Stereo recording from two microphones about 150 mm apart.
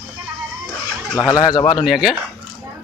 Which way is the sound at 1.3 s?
25° left (ahead or behind).